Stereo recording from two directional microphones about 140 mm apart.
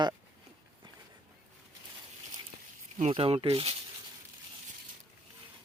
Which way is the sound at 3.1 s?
40° right (ahead or behind).